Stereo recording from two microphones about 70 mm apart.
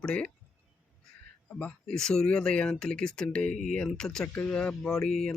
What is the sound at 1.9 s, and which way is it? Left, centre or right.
Speech, centre.